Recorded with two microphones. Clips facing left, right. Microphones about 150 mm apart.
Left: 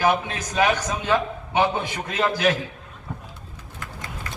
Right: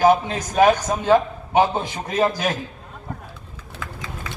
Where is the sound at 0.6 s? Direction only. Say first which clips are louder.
Right 7 dB; 45° right (ahead or behind).